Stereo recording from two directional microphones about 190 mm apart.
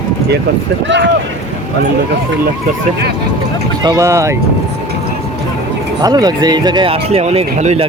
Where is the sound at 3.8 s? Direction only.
20° right (ahead or behind).